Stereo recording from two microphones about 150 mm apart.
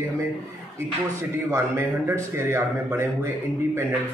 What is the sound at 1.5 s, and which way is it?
A man's voice, 15° right (ahead or behind).